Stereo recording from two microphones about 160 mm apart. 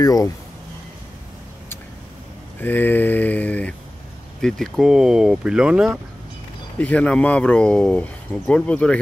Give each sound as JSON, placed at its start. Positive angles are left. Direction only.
{"t": 0.0, "sound": "speech", "side_deg": 20}
{"t": 2.6, "sound": "speech", "side_deg": 10}
{"t": 6.8, "sound": "speech", "side_deg": 10}